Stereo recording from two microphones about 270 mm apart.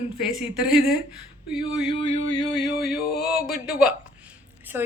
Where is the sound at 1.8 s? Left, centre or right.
Centre.